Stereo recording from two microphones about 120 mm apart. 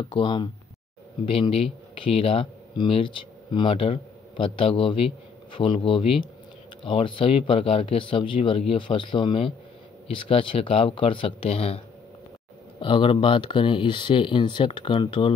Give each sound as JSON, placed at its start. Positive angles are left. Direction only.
{"t": 0.1, "sound": "speech", "side_deg": 45}
{"t": 12.8, "sound": "speech", "side_deg": 45}